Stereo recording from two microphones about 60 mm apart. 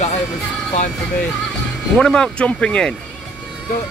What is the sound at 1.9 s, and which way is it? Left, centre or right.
Speech, centre.